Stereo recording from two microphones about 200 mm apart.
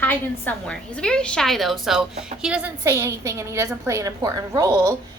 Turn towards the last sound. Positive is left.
turn(degrees=-15)  # may be behind; listen again after turning